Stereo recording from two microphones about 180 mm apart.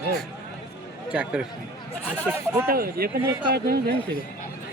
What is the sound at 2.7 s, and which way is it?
Speech, 55° right (ahead or behind).